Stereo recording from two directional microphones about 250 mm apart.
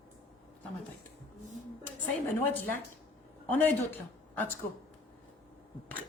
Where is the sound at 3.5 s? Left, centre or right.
Centre.